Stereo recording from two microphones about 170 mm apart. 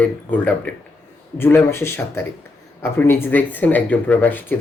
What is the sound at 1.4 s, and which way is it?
A man's voice, 15° left (ahead or behind).